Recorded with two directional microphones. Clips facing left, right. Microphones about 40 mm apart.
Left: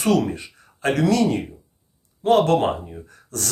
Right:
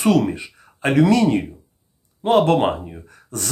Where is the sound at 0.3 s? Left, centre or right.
Right.